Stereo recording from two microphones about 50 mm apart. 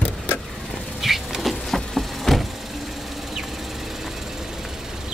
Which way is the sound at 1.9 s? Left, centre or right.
Centre.